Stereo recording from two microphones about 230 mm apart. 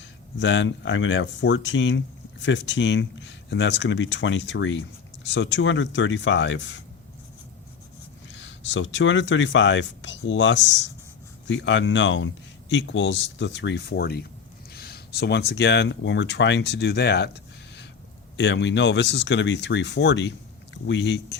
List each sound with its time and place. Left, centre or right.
0.0 s speech: left
8.3 s speech: left